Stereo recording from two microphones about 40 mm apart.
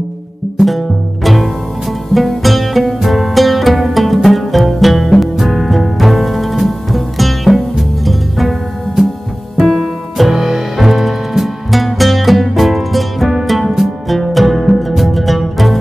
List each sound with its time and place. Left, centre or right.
0.6 s music: centre